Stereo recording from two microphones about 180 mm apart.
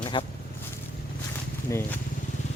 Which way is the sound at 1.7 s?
15° left (ahead or behind).